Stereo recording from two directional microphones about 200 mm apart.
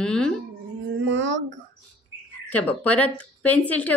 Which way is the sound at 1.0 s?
65° right (ahead or behind).